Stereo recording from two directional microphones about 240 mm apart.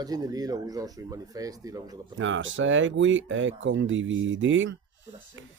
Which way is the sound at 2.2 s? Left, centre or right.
Right.